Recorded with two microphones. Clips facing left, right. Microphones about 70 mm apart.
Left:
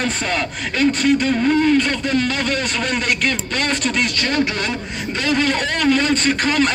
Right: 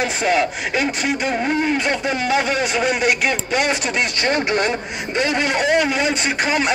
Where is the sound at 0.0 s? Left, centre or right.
Centre.